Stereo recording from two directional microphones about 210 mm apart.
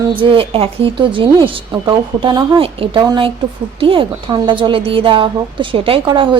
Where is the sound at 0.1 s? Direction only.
25° right (ahead or behind).